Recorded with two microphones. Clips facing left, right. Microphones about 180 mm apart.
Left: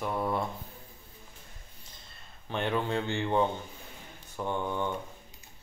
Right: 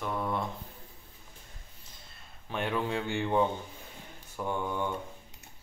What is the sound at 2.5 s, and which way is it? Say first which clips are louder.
Speech: left 1 dB; 5° right (ahead or behind).